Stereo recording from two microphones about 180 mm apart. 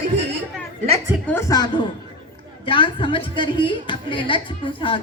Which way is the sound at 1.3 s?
15° left (ahead or behind).